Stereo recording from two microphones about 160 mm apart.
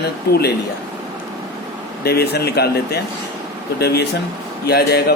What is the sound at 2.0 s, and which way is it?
A man's voice, 85° left.